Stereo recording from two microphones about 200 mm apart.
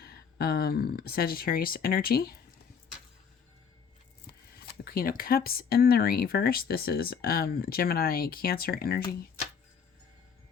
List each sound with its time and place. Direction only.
0.0 s speech: 50° left (ahead or behind)
4.9 s speech: 45° left (ahead or behind)